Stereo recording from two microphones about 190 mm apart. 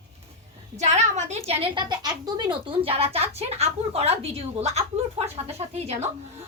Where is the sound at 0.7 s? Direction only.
35° right (ahead or behind).